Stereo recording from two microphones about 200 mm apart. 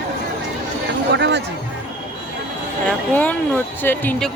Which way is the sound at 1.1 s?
60° right (ahead or behind).